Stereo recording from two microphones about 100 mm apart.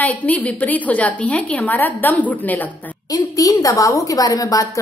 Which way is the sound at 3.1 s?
35° left (ahead or behind).